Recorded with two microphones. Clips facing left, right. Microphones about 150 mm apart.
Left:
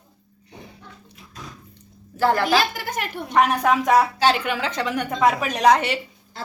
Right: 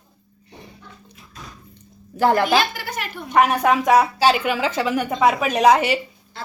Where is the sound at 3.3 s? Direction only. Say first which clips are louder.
Right 2 dB; 5° right (ahead or behind).